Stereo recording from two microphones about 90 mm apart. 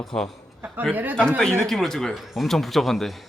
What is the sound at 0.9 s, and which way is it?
Speech, 20° right (ahead or behind).